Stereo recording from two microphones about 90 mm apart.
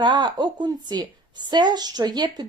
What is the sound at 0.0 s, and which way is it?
A woman's voice, 55° right (ahead or behind).